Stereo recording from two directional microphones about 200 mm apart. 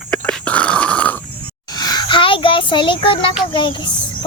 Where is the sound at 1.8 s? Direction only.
20° left (ahead or behind).